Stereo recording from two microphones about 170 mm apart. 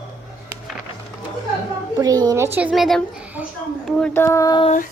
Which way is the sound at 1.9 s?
20° right (ahead or behind).